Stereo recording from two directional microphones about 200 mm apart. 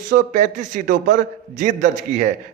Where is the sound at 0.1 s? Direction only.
40° right (ahead or behind).